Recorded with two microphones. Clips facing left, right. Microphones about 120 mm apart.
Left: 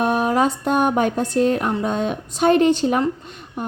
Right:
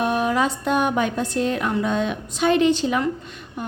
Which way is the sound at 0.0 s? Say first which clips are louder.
Left 3 dB; 45° left (ahead or behind).